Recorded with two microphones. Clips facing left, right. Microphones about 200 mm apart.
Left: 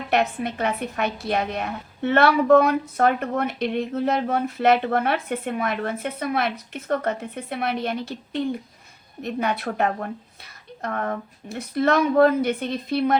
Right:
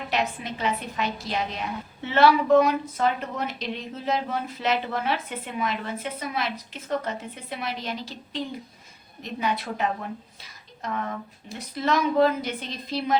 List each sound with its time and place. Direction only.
0.1 s a woman's voice: 60° left (ahead or behind)